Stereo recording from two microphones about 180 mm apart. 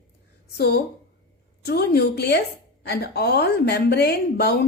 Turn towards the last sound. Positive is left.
turn(degrees=65)  # may be behind; listen again after turning